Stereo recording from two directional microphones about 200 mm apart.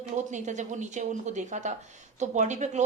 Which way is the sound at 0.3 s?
35° right (ahead or behind).